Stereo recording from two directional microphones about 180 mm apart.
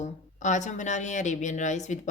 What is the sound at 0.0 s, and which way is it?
A woman's voice, 40° left (ahead or behind).